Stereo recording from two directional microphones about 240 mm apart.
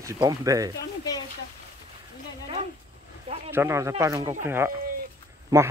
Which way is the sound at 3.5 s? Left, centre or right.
Centre.